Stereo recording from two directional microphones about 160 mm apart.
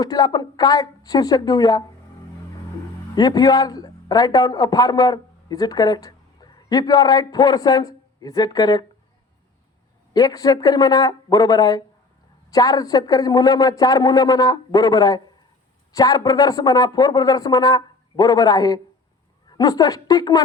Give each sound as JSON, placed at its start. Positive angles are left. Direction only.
{"t": 0.0, "sound": "speech", "side_deg": 25}
{"t": 3.2, "sound": "a man's voice", "side_deg": 25}
{"t": 10.2, "sound": "speech", "side_deg": 25}